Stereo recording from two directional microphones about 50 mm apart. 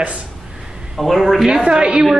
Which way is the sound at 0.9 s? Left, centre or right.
Centre.